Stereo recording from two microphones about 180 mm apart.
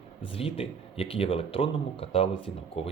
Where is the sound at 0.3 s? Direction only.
30° left (ahead or behind).